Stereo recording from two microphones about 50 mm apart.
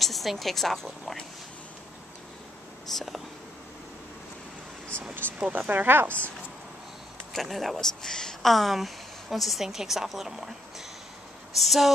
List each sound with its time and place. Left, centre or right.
0.0 s a woman's voice: centre
2.9 s speech: centre
5.5 s speech: right
7.3 s speech: centre
11.5 s speech: centre